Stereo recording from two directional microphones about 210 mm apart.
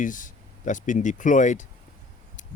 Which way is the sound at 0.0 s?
40° left (ahead or behind).